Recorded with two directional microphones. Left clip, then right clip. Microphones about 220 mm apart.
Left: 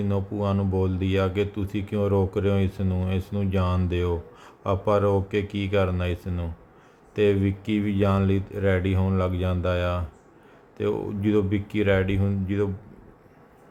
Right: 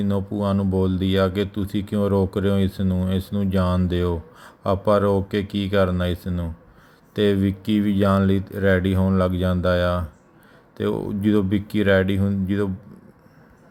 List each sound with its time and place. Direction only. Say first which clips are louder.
0.1 s speech: right 3 dB; 15° right (ahead or behind)